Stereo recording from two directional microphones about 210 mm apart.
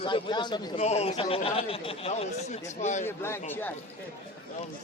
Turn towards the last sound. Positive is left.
turn(degrees=10)  # may be behind; listen again after turning